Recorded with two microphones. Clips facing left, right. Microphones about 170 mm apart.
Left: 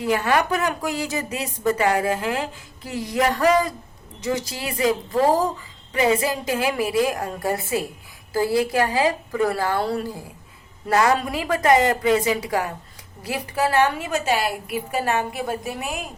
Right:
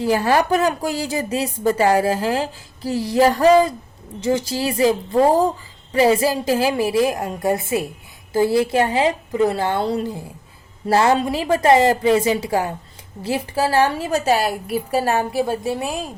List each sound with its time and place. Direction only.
0.0 s a woman's voice: 30° right (ahead or behind)